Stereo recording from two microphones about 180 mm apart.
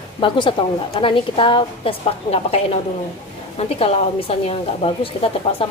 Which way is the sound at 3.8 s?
35° left (ahead or behind).